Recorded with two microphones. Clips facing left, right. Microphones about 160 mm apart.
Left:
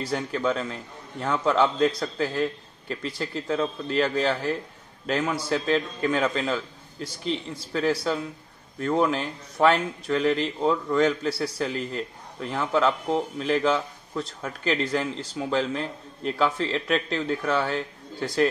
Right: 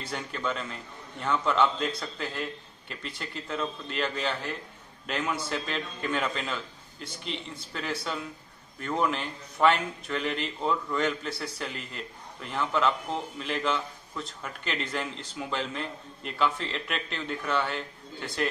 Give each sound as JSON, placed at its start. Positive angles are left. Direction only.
{"t": 0.0, "sound": "a man's voice", "side_deg": 40}